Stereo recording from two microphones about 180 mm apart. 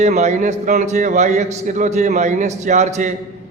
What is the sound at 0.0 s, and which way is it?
A man's voice, 40° right (ahead or behind).